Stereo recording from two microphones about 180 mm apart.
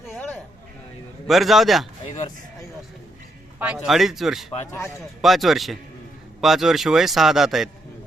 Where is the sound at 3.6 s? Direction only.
10° right (ahead or behind).